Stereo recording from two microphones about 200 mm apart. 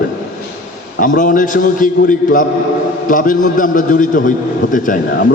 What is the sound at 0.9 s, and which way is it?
A man's voice, 40° left (ahead or behind).